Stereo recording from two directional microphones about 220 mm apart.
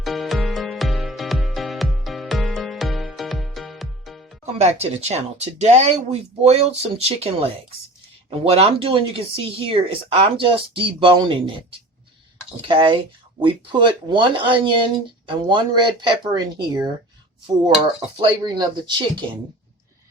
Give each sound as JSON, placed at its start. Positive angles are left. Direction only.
{"t": 0.0, "sound": "music", "side_deg": 0}
{"t": 4.5, "sound": "speech", "side_deg": -30}
{"t": 12.6, "sound": "speech", "side_deg": -20}
{"t": 18.2, "sound": "speech", "side_deg": -20}